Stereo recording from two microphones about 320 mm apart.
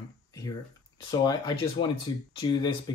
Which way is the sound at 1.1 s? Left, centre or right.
Centre.